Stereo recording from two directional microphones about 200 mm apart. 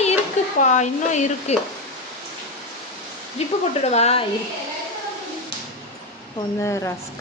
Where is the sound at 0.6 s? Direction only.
35° left (ahead or behind).